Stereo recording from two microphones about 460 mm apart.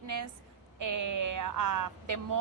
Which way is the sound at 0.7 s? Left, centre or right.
Right.